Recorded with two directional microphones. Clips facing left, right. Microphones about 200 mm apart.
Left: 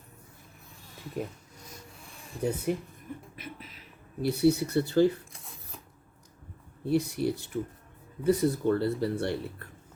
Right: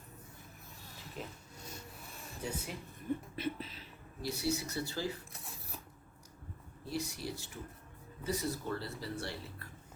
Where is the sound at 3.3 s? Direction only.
30° right (ahead or behind).